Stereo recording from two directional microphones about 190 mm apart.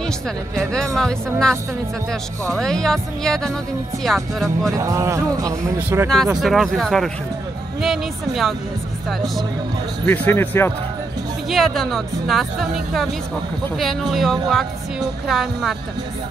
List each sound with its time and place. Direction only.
0.9 s speech: 5° left (ahead or behind)
4.7 s speech: 15° right (ahead or behind)
6.4 s speech: centre (ahead or behind)
10.0 s speech: 10° left (ahead or behind)
11.4 s speech: centre (ahead or behind)